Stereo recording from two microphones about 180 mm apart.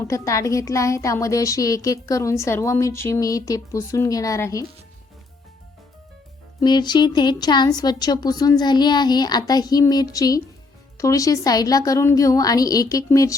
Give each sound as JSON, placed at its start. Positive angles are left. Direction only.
{"t": 0.0, "sound": "a woman's voice", "side_deg": 15}
{"t": 6.6, "sound": "a woman's voice", "side_deg": 25}